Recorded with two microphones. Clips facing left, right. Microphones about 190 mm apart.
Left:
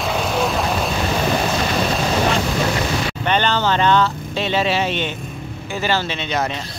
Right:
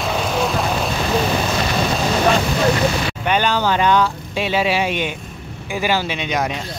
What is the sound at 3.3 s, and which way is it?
Speech, 10° right (ahead or behind).